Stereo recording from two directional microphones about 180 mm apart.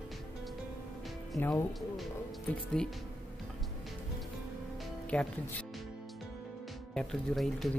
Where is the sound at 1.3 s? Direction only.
15° left (ahead or behind).